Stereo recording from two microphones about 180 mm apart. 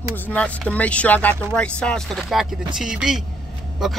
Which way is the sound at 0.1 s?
10° left (ahead or behind).